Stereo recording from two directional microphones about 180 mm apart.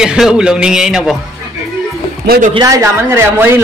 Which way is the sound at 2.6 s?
20° right (ahead or behind).